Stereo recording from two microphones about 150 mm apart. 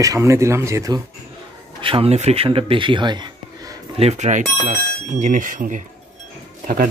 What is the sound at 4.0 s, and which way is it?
Speech, 50° right (ahead or behind).